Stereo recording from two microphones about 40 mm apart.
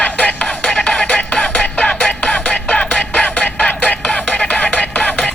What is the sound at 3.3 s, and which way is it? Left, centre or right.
Music, left.